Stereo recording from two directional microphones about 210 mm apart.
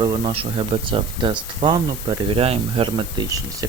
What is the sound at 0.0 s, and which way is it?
Speech, 20° right (ahead or behind).